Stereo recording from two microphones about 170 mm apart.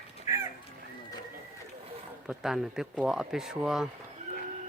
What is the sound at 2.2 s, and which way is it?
Speech, 5° right (ahead or behind).